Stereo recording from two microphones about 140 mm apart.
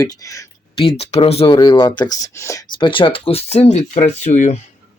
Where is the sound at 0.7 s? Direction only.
40° left (ahead or behind).